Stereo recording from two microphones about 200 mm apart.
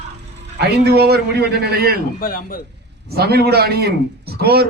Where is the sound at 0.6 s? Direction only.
55° right (ahead or behind).